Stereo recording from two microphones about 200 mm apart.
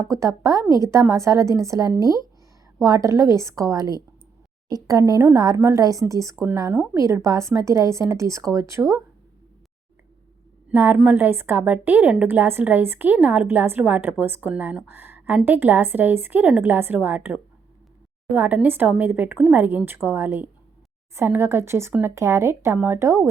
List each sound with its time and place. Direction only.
0.1 s a woman's voice: 15° right (ahead or behind)
10.7 s a woman's voice: 10° right (ahead or behind)